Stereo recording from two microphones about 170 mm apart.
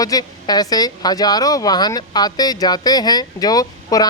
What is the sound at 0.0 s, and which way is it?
Speech, 20° left (ahead or behind).